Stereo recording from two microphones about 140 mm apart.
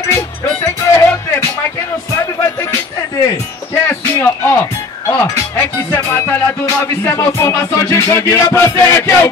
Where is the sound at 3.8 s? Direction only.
15° left (ahead or behind).